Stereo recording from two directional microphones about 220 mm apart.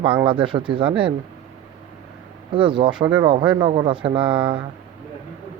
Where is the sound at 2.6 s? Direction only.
20° right (ahead or behind).